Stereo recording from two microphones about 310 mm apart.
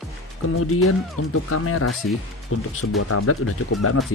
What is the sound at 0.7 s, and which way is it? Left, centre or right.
Speech, left.